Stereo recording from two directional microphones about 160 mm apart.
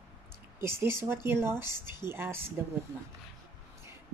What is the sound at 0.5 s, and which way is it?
A woman's voice, 15° right (ahead or behind).